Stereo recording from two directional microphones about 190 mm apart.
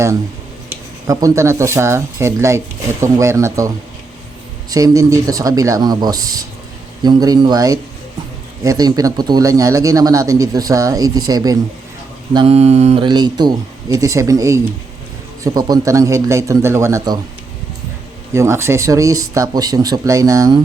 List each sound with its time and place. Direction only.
1.0 s speech: 20° right (ahead or behind)
4.7 s speech: 20° right (ahead or behind)
18.3 s speech: 15° right (ahead or behind)